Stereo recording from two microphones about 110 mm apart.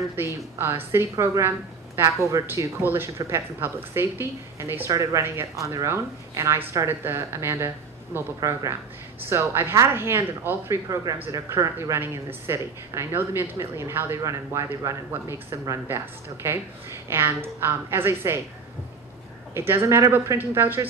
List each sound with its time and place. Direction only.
0.1 s speech: 20° right (ahead or behind)
19.5 s speech: 20° right (ahead or behind)